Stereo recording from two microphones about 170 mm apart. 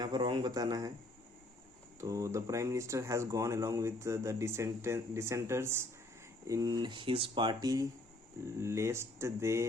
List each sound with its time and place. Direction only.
0.0 s speech: 25° right (ahead or behind)
2.0 s speech: 20° right (ahead or behind)